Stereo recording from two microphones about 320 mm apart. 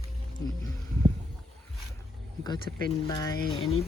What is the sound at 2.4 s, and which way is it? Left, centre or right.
Speech, centre.